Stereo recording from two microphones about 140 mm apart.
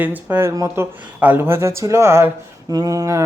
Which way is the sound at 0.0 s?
10° right (ahead or behind).